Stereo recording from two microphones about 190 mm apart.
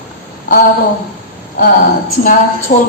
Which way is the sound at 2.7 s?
40° left (ahead or behind).